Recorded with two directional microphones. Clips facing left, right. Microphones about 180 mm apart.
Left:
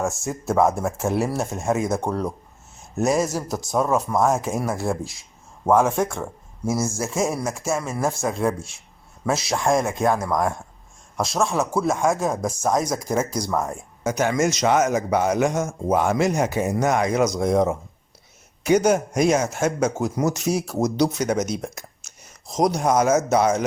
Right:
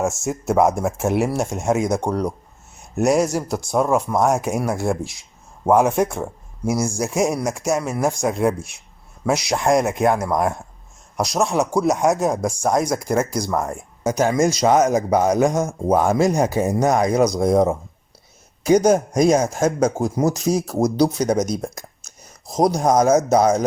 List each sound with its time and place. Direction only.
0.0 s speech: 20° right (ahead or behind)
2.7 s a sound: 15° right (ahead or behind)
3.3 s speech: 10° right (ahead or behind)
14.0 s speech: 35° right (ahead or behind)